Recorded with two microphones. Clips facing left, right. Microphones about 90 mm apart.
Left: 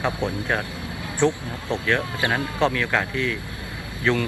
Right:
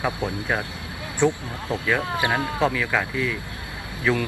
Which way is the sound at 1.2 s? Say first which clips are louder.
Even; 15° right (ahead or behind).